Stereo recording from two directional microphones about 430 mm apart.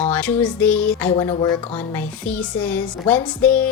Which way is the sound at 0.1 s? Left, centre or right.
Centre.